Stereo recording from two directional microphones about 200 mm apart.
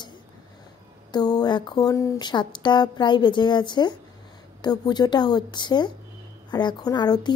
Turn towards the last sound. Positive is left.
turn(degrees=20)  # may be behind; listen again after turning